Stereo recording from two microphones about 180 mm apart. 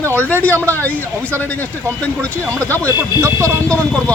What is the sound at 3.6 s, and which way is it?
Speech, 5° left (ahead or behind).